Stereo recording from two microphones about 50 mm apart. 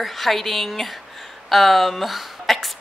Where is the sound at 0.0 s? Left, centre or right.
Centre.